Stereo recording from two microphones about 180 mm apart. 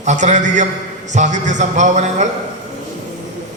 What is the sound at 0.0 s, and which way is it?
A man's voice, 40° right (ahead or behind).